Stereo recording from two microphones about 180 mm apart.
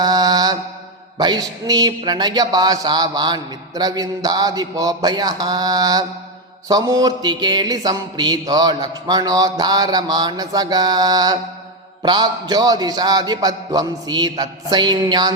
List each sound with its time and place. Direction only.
0.0 s mantra: 20° right (ahead or behind)
1.2 s speech: 25° right (ahead or behind)